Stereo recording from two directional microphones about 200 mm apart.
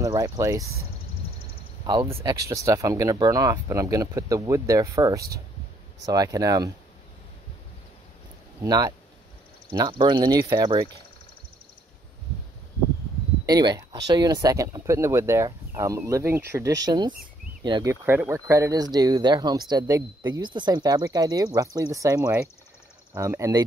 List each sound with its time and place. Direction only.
0.0 s speech: 15° right (ahead or behind)
1.9 s speech: 25° right (ahead or behind)
8.6 s speech: 20° right (ahead or behind)
13.5 s speech: 20° right (ahead or behind)
18.0 s speech: 10° right (ahead or behind)